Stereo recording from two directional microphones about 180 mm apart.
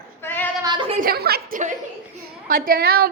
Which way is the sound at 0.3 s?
10° left (ahead or behind).